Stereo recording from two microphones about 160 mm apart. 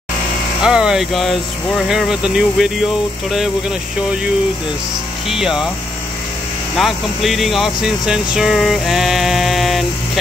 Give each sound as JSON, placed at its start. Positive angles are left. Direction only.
{"t": 0.6, "sound": "speech", "side_deg": -5}
{"t": 5.3, "sound": "speech", "side_deg": -5}
{"t": 6.8, "sound": "speech", "side_deg": 0}